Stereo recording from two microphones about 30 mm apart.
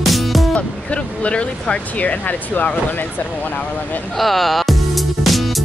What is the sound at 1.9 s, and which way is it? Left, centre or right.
Speech, left.